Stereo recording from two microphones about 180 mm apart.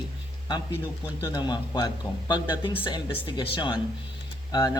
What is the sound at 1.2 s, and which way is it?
Speech, 20° left (ahead or behind).